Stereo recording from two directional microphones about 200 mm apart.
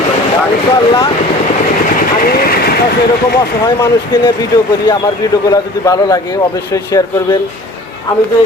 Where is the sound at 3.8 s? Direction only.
15° left (ahead or behind).